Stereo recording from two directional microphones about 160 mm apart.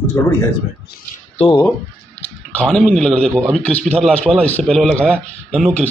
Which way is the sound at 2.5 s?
5° left (ahead or behind).